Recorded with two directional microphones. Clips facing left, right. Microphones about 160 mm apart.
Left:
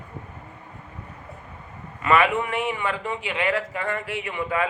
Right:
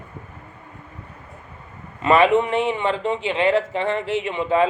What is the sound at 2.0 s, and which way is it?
Speech, 25° right (ahead or behind).